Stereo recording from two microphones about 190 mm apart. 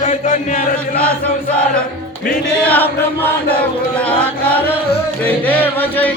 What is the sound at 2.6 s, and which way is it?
Music, 10° left (ahead or behind).